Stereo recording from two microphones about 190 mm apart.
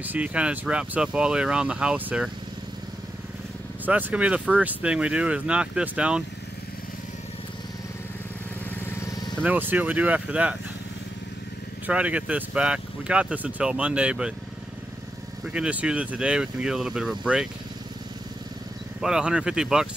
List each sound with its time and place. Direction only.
0.0 s speech: 10° right (ahead or behind)
3.8 s speech: 10° right (ahead or behind)
9.4 s speech: 10° right (ahead or behind)
11.8 s speech: 5° right (ahead or behind)
15.5 s speech: 5° right (ahead or behind)
18.9 s speech: 5° right (ahead or behind)